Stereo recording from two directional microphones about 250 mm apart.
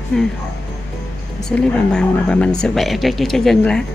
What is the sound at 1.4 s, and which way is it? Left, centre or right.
Speech, centre.